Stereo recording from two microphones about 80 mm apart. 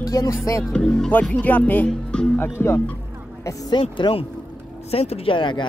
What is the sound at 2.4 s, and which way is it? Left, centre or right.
Speech, left.